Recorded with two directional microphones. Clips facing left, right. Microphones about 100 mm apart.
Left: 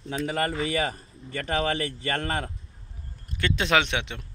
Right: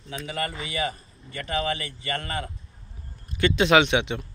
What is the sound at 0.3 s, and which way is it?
Speech, 45° left (ahead or behind).